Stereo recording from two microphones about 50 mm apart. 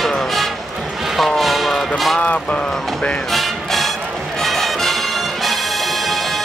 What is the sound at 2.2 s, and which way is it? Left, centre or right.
Honk, left.